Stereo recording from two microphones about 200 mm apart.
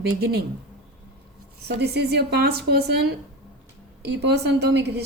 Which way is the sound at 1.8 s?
55° right (ahead or behind).